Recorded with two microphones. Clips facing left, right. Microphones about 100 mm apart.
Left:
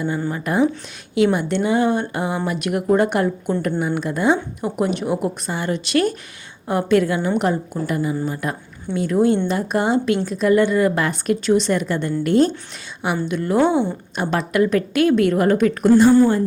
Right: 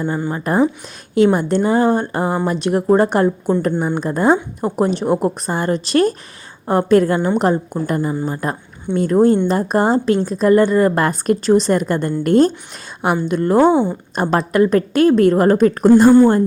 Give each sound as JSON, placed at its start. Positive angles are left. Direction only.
{"t": 0.3, "sound": "a woman's voice", "side_deg": -35}